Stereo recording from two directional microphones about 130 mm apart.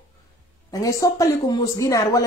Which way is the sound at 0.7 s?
25° left (ahead or behind).